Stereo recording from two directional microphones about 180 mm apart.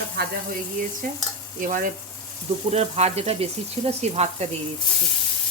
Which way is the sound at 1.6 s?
45° right (ahead or behind).